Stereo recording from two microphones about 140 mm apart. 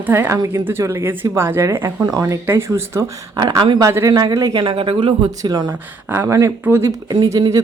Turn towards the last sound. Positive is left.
turn(degrees=-25)  # may be behind; listen again after turning